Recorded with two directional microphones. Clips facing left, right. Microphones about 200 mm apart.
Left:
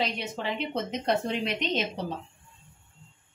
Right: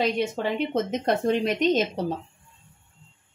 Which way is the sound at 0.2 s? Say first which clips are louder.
Right 7 dB; 50° right (ahead or behind).